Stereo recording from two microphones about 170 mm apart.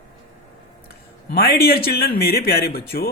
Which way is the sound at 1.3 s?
65° left (ahead or behind).